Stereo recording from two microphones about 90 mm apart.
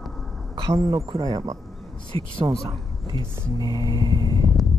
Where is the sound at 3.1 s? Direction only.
45° left (ahead or behind).